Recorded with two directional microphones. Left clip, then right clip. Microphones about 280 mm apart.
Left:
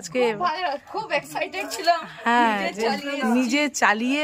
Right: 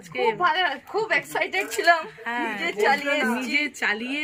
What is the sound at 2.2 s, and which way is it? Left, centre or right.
A woman's voice, left.